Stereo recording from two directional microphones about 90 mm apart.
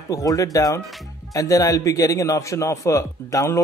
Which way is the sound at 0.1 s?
40° left (ahead or behind).